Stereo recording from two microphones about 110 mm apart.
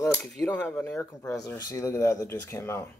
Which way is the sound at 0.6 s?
15° left (ahead or behind).